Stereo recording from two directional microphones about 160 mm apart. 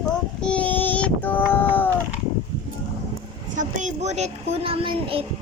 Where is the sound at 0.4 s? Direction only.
10° left (ahead or behind).